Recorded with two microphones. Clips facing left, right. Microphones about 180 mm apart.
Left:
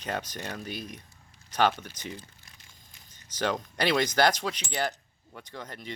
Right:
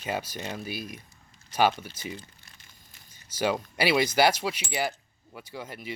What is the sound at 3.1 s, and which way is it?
Speech, 10° right (ahead or behind).